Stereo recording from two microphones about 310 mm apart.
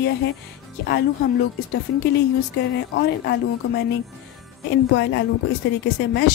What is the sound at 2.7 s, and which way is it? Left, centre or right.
Speech, left.